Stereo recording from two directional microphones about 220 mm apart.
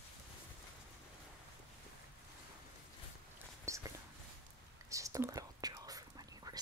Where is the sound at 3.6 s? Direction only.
15° right (ahead or behind).